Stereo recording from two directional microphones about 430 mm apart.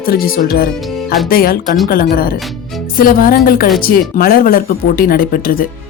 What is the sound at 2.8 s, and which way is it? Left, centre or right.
A woman's voice, centre.